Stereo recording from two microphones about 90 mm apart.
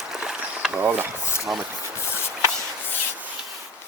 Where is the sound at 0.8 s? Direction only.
20° right (ahead or behind).